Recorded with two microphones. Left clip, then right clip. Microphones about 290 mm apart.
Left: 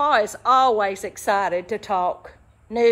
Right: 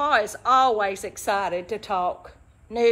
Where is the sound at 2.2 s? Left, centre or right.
Left.